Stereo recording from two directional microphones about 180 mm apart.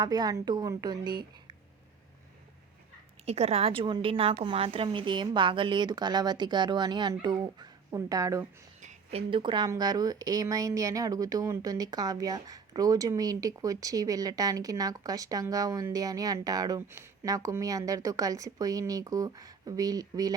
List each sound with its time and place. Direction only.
0.0 s speech: 20° right (ahead or behind)
3.2 s a woman's voice: 35° right (ahead or behind); by 8.4 s 15° right (ahead or behind)
8.8 s speech: 40° right (ahead or behind); by 20.3 s 20° right (ahead or behind)